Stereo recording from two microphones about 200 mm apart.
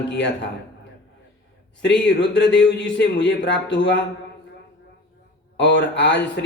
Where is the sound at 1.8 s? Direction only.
60° left (ahead or behind).